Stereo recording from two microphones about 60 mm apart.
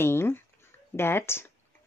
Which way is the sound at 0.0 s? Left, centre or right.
Left.